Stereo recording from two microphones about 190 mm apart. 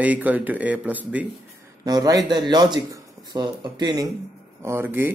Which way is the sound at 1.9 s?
20° right (ahead or behind).